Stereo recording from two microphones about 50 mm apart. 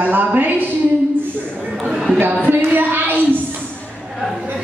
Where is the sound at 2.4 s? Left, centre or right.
Right.